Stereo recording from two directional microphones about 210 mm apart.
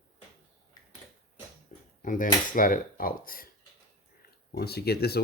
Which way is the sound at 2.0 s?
40° left (ahead or behind).